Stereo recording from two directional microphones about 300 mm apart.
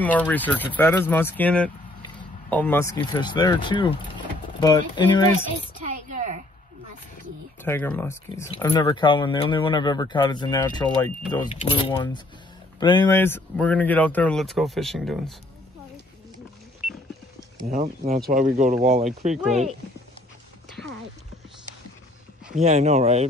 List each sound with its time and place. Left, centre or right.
0.0 s speech: centre
5.3 s a sound: right
7.6 s speech: centre
17.6 s speech: right
22.6 s speech: right